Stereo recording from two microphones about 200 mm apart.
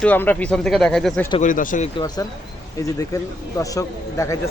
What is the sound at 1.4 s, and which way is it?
Speech, 40° left (ahead or behind).